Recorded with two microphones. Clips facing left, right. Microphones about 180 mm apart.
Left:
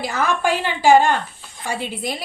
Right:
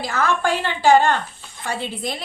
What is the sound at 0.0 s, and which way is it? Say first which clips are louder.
A woman's voice: left 1 dB; 15° left (ahead or behind).